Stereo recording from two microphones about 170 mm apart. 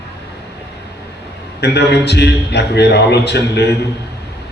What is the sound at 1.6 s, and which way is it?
A man's voice, 80° left.